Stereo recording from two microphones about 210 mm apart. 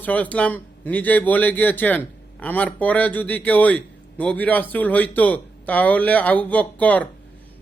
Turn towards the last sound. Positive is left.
turn(degrees=5)  # may be behind; listen again after turning